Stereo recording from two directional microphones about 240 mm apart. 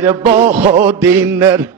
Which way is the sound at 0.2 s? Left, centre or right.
Right.